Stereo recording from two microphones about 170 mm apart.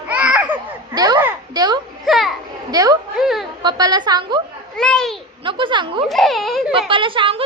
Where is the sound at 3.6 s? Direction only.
25° right (ahead or behind).